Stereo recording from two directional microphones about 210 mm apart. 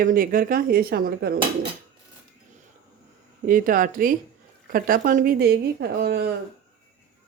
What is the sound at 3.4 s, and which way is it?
Speech, 40° right (ahead or behind).